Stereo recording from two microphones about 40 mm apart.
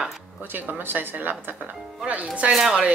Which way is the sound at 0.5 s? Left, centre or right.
Right.